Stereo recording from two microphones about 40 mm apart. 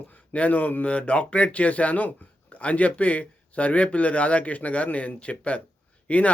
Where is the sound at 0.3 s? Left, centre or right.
Left.